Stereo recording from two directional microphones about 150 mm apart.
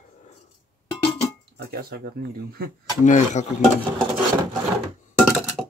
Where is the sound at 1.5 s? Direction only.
90° right.